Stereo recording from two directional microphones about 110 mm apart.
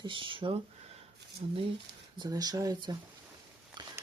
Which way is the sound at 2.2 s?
35° right (ahead or behind).